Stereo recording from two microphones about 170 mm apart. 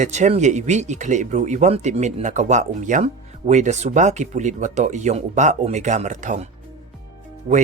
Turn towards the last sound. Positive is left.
turn(degrees=-40)  # may be behind; listen again after turning